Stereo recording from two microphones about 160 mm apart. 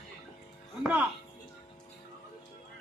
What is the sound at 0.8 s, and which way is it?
Speech, 5° right (ahead or behind).